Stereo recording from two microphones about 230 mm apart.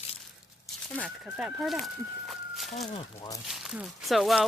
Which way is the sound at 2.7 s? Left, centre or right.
Left.